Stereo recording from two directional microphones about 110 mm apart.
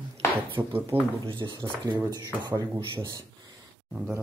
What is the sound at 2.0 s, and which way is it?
Speech, 35° right (ahead or behind).